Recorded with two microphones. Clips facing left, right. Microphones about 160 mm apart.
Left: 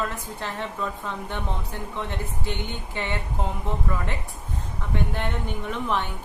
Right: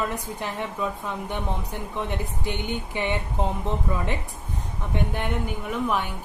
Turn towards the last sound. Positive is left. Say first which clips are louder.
# right 1 dB
turn(degrees=-10)  # may be behind; listen again after turning